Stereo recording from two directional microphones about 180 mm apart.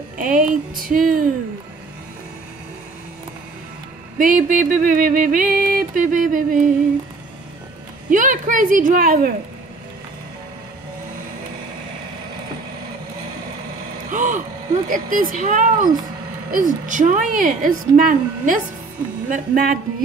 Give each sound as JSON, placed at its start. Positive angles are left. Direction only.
{"t": 0.2, "sound": "music", "side_deg": -50}
{"t": 4.2, "sound": "music", "side_deg": -45}
{"t": 8.1, "sound": "music", "side_deg": -45}
{"t": 14.1, "sound": "music", "side_deg": -45}